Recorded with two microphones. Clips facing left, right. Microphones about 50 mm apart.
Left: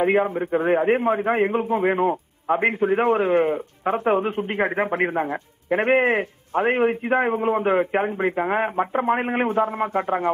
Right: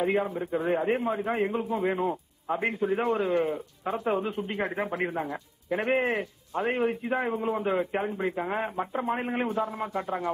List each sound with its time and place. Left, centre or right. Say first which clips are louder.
0.0 s a man's voice: left 7 dB; left